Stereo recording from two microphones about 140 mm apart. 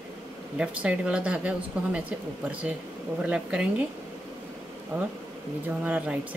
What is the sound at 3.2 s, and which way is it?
Speech, 10° right (ahead or behind).